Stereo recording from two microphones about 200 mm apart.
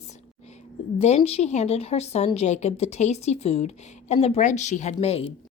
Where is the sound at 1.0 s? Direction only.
30° left (ahead or behind).